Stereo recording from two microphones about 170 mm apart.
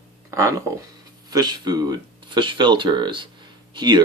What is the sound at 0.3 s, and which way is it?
Speech, 15° right (ahead or behind).